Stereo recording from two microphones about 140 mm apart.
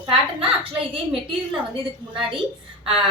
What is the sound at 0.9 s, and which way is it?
Speech, 40° right (ahead or behind).